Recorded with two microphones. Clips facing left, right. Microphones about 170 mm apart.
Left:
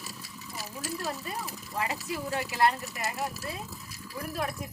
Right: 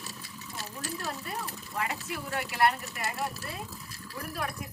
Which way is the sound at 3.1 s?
15° left (ahead or behind).